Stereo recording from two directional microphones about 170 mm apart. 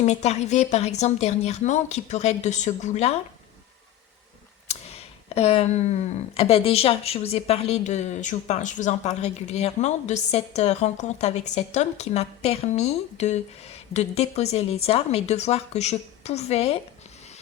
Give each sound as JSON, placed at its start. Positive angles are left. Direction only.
{"t": 0.0, "sound": "speech", "side_deg": 40}
{"t": 4.7, "sound": "speech", "side_deg": 40}